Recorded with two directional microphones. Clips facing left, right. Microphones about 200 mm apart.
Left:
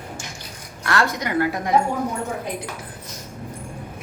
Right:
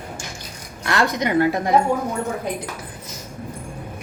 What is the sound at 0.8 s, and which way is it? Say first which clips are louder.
Speech: right 2 dB; 20° right (ahead or behind).